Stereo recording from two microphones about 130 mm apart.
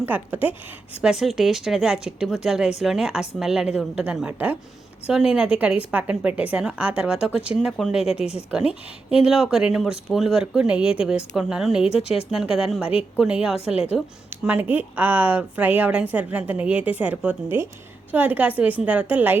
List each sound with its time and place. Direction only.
0.0 s speech: 15° right (ahead or behind)
1.0 s speech: 5° right (ahead or behind)
8.2 s speech: 50° left (ahead or behind)
8.4 s speech: 10° right (ahead or behind)
14.3 s speech: 15° right (ahead or behind)